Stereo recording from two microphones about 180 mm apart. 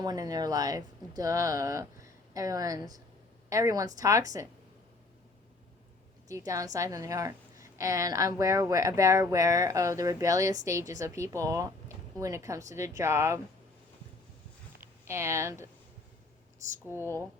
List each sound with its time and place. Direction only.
0.0 s speech: 20° right (ahead or behind)
6.2 s a woman's voice: 20° right (ahead or behind)
14.8 s speech: 15° right (ahead or behind)
17.0 s speech: 15° left (ahead or behind)